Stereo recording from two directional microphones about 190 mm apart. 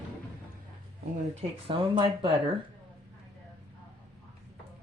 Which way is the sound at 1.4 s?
30° right (ahead or behind).